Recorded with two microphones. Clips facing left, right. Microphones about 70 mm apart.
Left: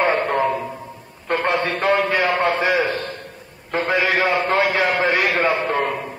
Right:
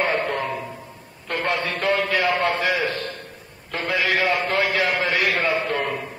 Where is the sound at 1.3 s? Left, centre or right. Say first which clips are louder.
Left 4 dB; left.